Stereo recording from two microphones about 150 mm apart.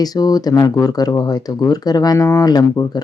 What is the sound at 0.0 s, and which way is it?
Speech, 25° left (ahead or behind).